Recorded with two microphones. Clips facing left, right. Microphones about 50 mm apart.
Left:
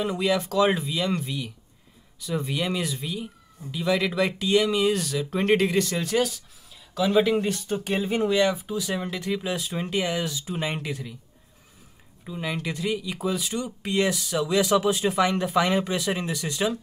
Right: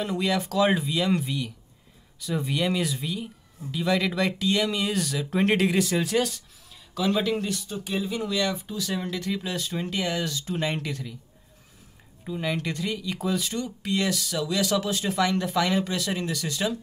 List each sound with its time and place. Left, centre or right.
0.0 s speech: centre
7.4 s speech: left
8.3 s speech: left
8.6 s speech: centre
12.3 s speech: centre
13.7 s speech: left